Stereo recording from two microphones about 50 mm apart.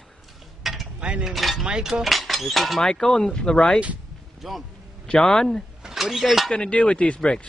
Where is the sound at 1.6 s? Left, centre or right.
Centre.